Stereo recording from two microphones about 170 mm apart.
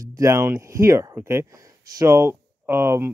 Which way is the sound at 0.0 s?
20° right (ahead or behind).